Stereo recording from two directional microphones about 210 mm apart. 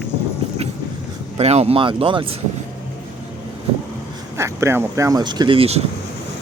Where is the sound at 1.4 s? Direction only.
30° right (ahead or behind).